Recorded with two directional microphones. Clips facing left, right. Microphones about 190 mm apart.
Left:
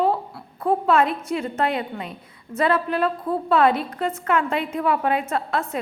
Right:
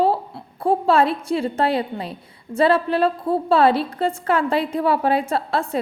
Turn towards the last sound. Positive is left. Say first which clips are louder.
# right 2 dB
turn(degrees=-30)  # may be behind; listen again after turning